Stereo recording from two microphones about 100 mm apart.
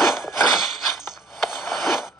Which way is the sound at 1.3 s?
Centre (ahead or behind).